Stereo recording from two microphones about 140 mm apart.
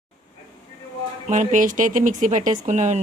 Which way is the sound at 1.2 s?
65° right (ahead or behind).